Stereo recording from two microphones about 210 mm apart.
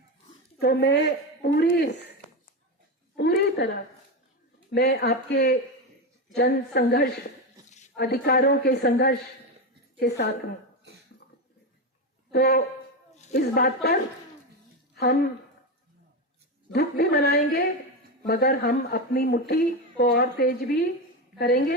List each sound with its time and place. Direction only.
0.6 s speech: 50° left (ahead or behind)
3.2 s a sound: 50° left (ahead or behind)
4.7 s speech: 50° left (ahead or behind)
12.3 s speech: 45° left (ahead or behind)
16.7 s a woman's voice: 50° left (ahead or behind)